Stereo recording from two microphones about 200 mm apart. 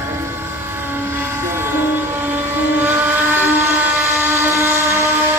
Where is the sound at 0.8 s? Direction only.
10° right (ahead or behind).